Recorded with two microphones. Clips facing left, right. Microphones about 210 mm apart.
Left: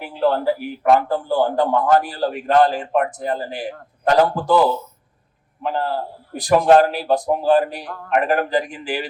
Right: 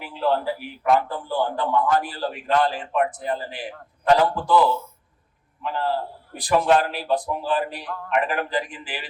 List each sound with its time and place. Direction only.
0.0 s a man's voice: 45° left (ahead or behind)